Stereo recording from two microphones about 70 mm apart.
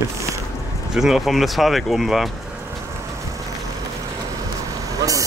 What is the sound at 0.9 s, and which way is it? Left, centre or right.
Speech, centre.